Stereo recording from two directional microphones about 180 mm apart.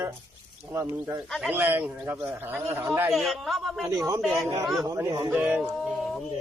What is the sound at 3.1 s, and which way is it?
Speech, centre (ahead or behind).